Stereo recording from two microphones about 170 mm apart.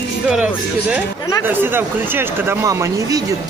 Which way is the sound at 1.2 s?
20° left (ahead or behind).